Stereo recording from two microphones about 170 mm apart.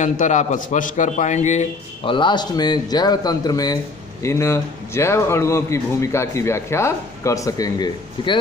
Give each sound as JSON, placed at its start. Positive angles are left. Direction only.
{"t": 0.0, "sound": "a man's voice", "side_deg": 45}
{"t": 2.0, "sound": "a man's voice", "side_deg": 25}